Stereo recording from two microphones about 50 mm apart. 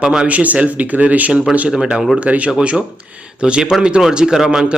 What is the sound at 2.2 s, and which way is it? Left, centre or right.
A man's voice, right.